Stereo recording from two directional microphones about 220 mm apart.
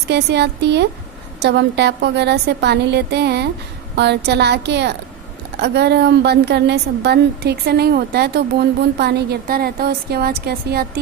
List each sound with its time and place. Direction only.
0.1 s a woman's voice: 50° right (ahead or behind)